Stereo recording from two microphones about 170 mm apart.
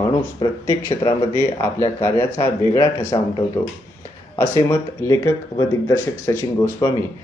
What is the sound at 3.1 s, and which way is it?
Speech, 25° left (ahead or behind).